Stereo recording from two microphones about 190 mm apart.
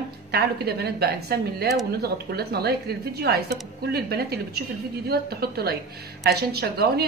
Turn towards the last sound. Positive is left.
turn(degrees=-55)  # may be behind; listen again after turning